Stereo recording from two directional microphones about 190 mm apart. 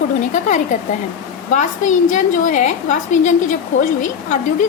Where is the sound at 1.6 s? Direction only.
40° left (ahead or behind).